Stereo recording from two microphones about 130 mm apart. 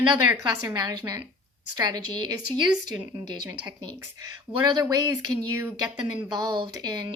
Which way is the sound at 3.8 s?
30° right (ahead or behind).